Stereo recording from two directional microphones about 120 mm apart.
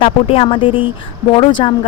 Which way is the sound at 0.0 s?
55° left (ahead or behind).